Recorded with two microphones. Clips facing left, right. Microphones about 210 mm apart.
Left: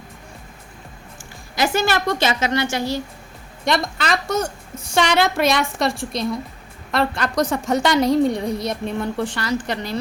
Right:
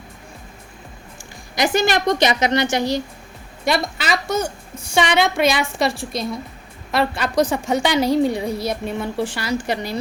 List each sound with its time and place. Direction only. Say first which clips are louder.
1.5 s a woman's voice: right 2 dB; 15° right (ahead or behind)
3.6 s a woman's voice: even; 5° right (ahead or behind)